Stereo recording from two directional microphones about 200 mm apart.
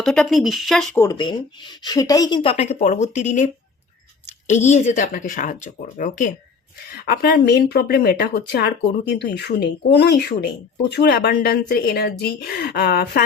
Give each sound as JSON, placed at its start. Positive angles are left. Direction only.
{"t": 0.0, "sound": "speech", "side_deg": 0}
{"t": 0.9, "sound": "speech", "side_deg": 20}
{"t": 4.4, "sound": "speech", "side_deg": 35}
{"t": 7.0, "sound": "speech", "side_deg": 50}